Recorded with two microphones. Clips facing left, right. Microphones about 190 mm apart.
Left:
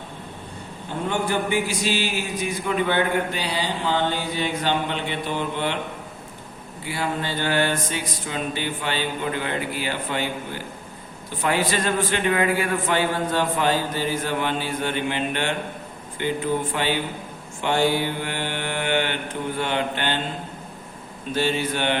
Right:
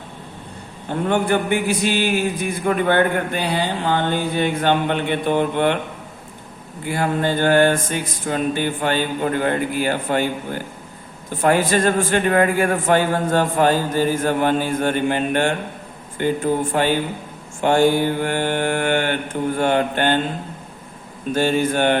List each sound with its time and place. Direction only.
1.0 s a man's voice: 55° right (ahead or behind)
6.8 s a man's voice: 50° right (ahead or behind)
21.3 s a man's voice: 45° right (ahead or behind)